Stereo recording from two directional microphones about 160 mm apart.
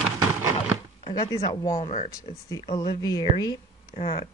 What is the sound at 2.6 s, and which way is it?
Speech, 30° left (ahead or behind).